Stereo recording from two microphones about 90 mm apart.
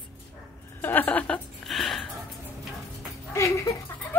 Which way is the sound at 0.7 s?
20° left (ahead or behind).